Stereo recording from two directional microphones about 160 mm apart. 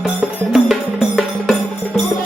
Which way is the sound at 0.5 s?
Centre (ahead or behind).